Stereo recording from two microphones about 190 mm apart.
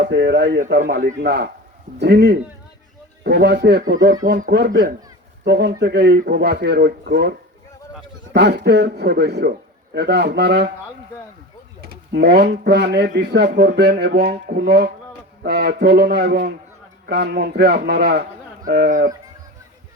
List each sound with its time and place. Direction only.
0.0 s speech: 60° right (ahead or behind)
11.8 s speech: 55° right (ahead or behind)